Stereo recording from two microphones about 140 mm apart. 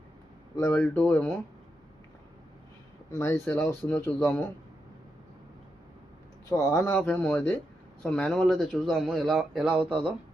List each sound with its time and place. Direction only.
0.5 s speech: 20° left (ahead or behind)
0.8 s speech: 10° left (ahead or behind)
3.1 s speech: 20° left (ahead or behind)
6.5 s speech: 25° left (ahead or behind)
6.8 s speech: 15° left (ahead or behind); by 10.1 s 10° right (ahead or behind)